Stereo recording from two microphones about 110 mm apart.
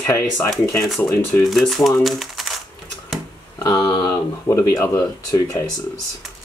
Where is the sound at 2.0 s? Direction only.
Centre (ahead or behind).